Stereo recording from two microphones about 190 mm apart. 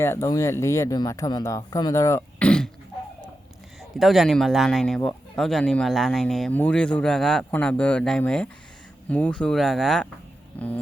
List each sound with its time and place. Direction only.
0.0 s speech: 15° left (ahead or behind)
3.8 s speech: centre (ahead or behind)